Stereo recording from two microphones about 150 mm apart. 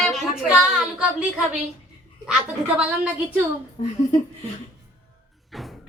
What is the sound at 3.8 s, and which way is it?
Speech, 55° left (ahead or behind).